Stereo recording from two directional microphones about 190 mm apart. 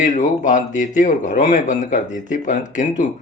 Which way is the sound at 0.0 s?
40° left (ahead or behind).